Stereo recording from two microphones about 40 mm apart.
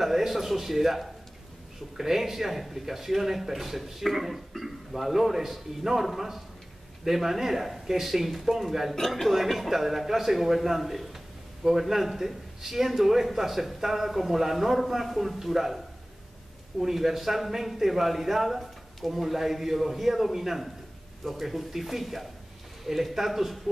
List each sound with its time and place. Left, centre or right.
0.0 s a man's voice: centre